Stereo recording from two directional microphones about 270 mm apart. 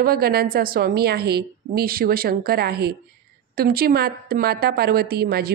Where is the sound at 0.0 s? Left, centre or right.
Right.